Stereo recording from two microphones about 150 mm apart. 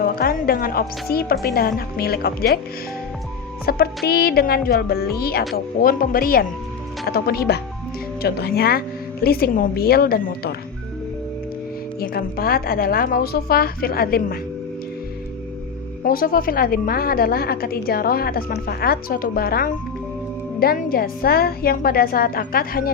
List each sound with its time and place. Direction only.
0.2 s a woman's voice: 80° left
3.7 s a woman's voice: 90° left
5.5 s speech: 75° left (ahead or behind)
7.0 s a woman's voice: 90° left
11.9 s a woman's voice: 85° left
16.0 s a woman's voice: 75° left (ahead or behind)